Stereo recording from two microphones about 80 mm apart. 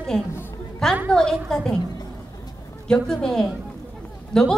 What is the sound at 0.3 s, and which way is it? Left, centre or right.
Music, left.